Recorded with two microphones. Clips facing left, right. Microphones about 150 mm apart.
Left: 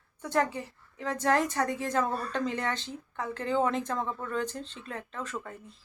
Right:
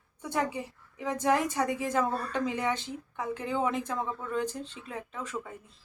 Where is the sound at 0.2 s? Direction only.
10° right (ahead or behind).